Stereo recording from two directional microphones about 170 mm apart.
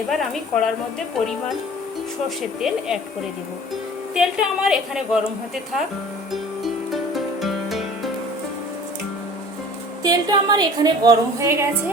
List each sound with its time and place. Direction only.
0.1 s a woman's voice: centre (ahead or behind)
2.4 s a woman's voice: centre (ahead or behind)
4.1 s a woman's voice: 5° right (ahead or behind)
6.3 s music: centre (ahead or behind)
10.0 s a woman's voice: 25° right (ahead or behind)